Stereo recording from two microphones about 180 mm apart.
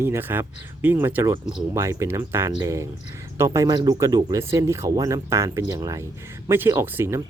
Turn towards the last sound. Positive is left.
turn(degrees=-15)  # may be behind; listen again after turning